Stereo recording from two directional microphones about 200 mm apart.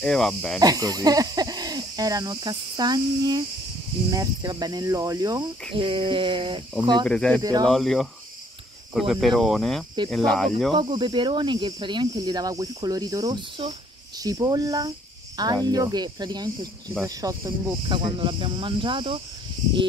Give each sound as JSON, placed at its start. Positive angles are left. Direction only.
{"t": 0.0, "sound": "speech", "side_deg": 0}
{"t": 0.6, "sound": "speech", "side_deg": -20}
{"t": 7.1, "sound": "speech", "side_deg": 5}
{"t": 10.7, "sound": "speech", "side_deg": -25}